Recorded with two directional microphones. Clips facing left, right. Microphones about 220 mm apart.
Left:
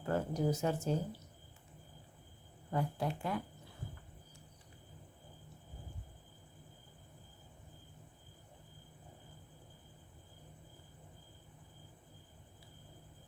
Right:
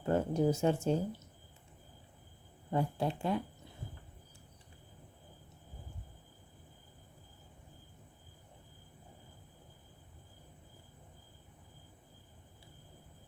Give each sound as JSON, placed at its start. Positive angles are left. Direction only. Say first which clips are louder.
{"t": 0.0, "sound": "speech", "louder": "right 4 dB", "side_deg": -25}
{"t": 2.6, "sound": "speech", "louder": "right 3 dB", "side_deg": -25}